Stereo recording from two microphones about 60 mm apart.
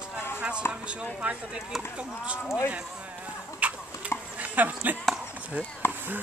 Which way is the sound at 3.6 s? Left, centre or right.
Right.